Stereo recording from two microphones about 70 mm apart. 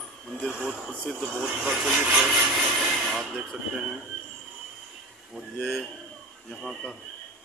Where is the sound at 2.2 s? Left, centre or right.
Centre.